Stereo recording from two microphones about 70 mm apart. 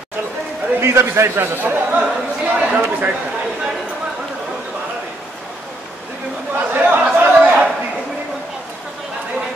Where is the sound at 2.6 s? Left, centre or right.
Centre.